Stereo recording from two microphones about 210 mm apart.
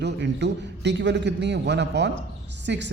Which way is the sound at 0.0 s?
55° right (ahead or behind).